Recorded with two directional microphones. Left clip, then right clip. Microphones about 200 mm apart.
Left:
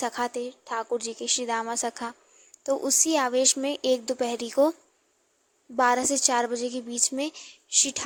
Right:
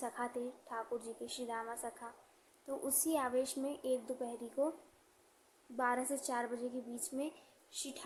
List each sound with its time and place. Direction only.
0.0 s a woman's voice: 45° left (ahead or behind)
5.7 s a woman's voice: 45° left (ahead or behind)